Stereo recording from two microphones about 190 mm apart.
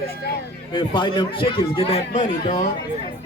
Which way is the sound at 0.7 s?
25° left (ahead or behind).